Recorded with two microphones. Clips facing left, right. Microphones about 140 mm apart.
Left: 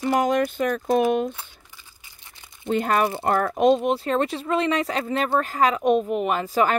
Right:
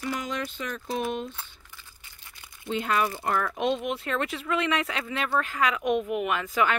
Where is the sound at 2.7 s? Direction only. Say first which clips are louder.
Left 5 dB; 50° left (ahead or behind).